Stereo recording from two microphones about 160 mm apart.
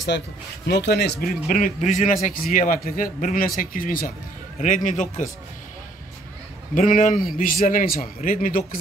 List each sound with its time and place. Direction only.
0.7 s a man's voice: 90° left; by 2.1 s 50° left (ahead or behind)
2.2 s a man's voice: 60° left (ahead or behind)
6.7 s a man's voice: 55° left (ahead or behind)